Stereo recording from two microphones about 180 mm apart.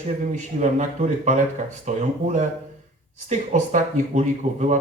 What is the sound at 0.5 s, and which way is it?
Speech, 45° right (ahead or behind).